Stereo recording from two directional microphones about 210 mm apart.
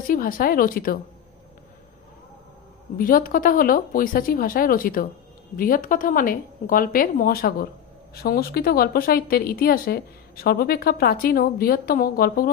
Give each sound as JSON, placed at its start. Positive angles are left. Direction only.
{"t": 0.1, "sound": "a woman's voice", "side_deg": 45}
{"t": 3.0, "sound": "a woman's voice", "side_deg": 40}